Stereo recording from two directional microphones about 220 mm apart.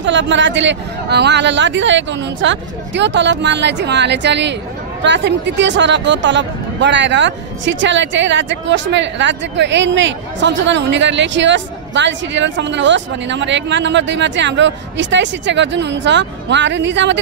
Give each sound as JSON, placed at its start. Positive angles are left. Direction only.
{"t": 0.0, "sound": "speech", "side_deg": -55}